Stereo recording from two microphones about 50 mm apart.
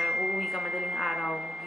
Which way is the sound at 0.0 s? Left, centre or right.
Centre.